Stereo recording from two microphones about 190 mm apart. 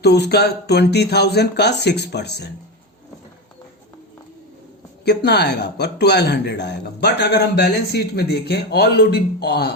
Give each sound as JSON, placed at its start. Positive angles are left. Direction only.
{"t": 0.0, "sound": "speech", "side_deg": 60}
{"t": 5.0, "sound": "speech", "side_deg": 60}